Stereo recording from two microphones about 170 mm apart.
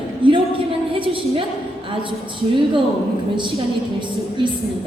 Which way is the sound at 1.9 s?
30° right (ahead or behind).